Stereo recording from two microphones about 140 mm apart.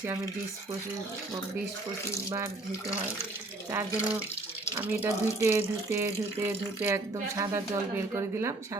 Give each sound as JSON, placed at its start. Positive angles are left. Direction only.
{"t": 3.7, "sound": "speech", "side_deg": -15}